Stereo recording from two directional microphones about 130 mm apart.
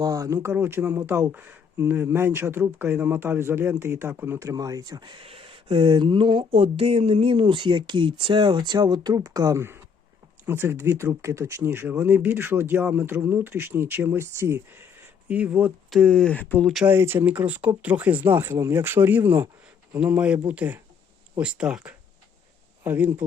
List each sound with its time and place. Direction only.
0.0 s speech: 25° right (ahead or behind); by 15.7 s 10° right (ahead or behind)
15.9 s speech: 5° left (ahead or behind)
16.8 s speech: 15° right (ahead or behind)